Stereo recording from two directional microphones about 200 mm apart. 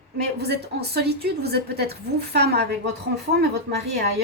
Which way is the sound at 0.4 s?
55° right (ahead or behind).